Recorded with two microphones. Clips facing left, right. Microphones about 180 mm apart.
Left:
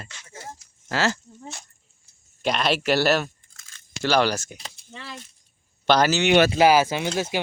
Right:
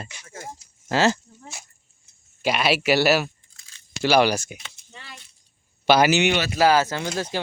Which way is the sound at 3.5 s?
50° left (ahead or behind).